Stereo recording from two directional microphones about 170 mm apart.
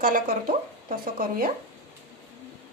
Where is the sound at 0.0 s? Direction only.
55° right (ahead or behind).